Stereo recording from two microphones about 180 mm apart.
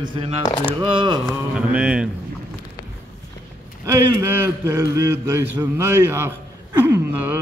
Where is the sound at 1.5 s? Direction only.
5° right (ahead or behind).